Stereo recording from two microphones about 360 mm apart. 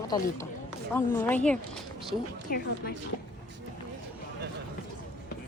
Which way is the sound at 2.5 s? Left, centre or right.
Left.